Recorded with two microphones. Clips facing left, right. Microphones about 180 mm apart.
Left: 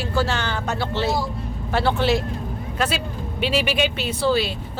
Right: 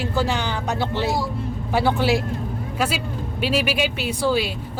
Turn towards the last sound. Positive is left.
turn(degrees=-10)  # may be behind; listen again after turning